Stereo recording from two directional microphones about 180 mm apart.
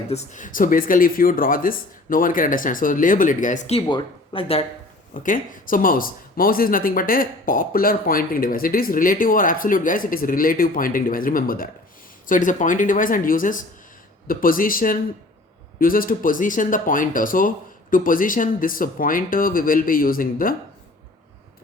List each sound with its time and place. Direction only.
0.1 s speech: 40° left (ahead or behind)
5.1 s speech: 50° left (ahead or behind)